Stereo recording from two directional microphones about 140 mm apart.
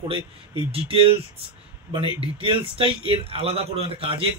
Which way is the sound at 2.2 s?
40° right (ahead or behind).